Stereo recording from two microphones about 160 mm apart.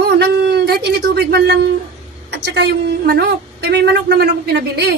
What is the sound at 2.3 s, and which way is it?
A woman's voice, 90° right.